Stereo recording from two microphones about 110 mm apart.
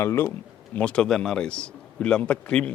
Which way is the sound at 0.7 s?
10° left (ahead or behind).